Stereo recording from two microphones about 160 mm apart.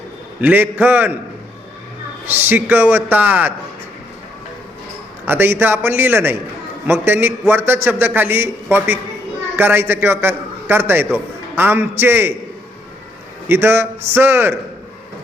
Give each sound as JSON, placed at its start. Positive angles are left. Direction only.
{"t": 0.4, "sound": "a man's voice", "side_deg": -10}
{"t": 2.2, "sound": "a man's voice", "side_deg": -10}
{"t": 5.2, "sound": "a man's voice", "side_deg": -15}
{"t": 13.5, "sound": "a man's voice", "side_deg": -15}